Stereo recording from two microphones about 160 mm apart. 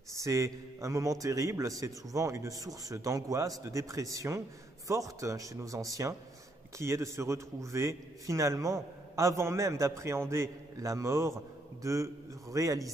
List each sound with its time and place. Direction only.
0.1 s a man's voice: 20° right (ahead or behind)